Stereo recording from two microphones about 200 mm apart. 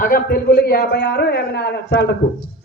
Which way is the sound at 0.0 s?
45° left (ahead or behind).